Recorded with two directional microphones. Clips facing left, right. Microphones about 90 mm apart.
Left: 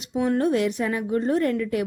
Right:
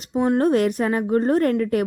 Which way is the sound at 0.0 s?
45° right (ahead or behind).